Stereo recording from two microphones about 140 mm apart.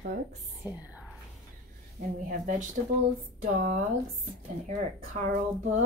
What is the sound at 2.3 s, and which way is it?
Speech, 70° right (ahead or behind).